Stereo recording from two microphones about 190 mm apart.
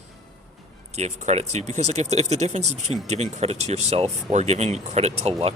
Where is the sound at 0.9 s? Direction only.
35° right (ahead or behind).